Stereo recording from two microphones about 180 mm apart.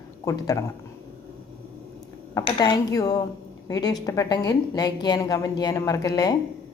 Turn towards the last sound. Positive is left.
turn(degrees=20)  # may be behind; listen again after turning